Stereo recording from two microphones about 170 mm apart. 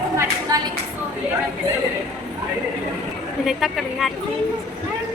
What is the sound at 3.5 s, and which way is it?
Speech, centre (ahead or behind).